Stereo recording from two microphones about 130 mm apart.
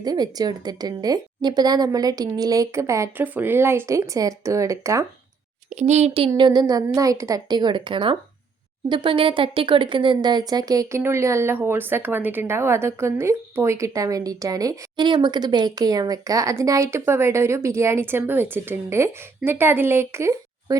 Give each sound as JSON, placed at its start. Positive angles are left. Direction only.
{"t": 0.0, "sound": "speech", "side_deg": -30}
{"t": 5.7, "sound": "a woman's voice", "side_deg": -60}